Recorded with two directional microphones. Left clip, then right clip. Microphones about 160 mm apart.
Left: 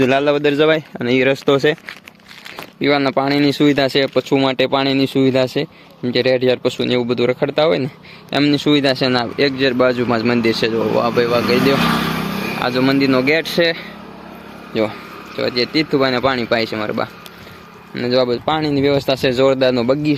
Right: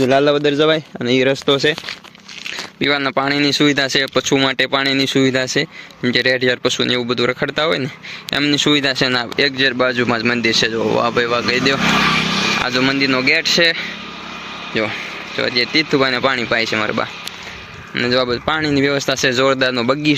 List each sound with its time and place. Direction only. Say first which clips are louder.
0.0 s speech: right 1 dB; 20° left (ahead or behind); by 1.4 s 5° left (ahead or behind)
1.5 s speech: left 2 dB; 15° left (ahead or behind)
2.8 s speech: left 1 dB; centre (ahead or behind)
12.6 s speech: even; 10° left (ahead or behind)